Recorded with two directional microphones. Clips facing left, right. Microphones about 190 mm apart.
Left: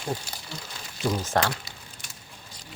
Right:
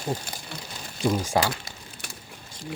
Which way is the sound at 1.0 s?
10° right (ahead or behind).